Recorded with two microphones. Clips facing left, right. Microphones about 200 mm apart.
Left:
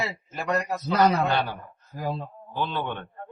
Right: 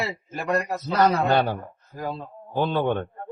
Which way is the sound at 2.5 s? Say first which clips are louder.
Right 7 dB; 45° right (ahead or behind).